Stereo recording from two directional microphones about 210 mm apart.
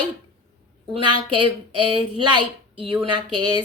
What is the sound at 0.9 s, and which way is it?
A woman's voice, 25° right (ahead or behind).